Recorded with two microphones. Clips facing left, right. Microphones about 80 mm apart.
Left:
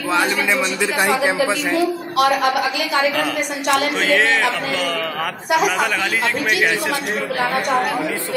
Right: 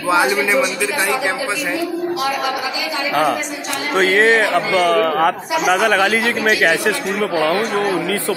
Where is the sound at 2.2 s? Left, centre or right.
Left.